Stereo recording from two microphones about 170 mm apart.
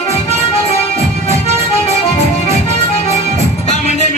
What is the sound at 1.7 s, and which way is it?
Music, 40° left (ahead or behind).